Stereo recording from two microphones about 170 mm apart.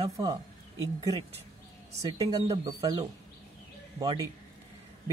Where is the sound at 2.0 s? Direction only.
25° right (ahead or behind).